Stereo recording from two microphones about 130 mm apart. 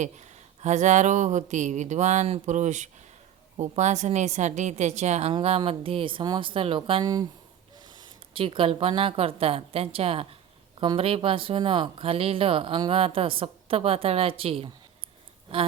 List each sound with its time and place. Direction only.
0.0 s a woman's voice: 65° right (ahead or behind)
5.3 s speech: 50° right (ahead or behind)
7.0 s speech: 30° right (ahead or behind)
8.3 s speech: 45° right (ahead or behind)